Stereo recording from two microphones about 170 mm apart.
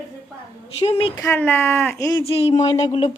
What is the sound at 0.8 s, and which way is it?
Speech, 35° left (ahead or behind).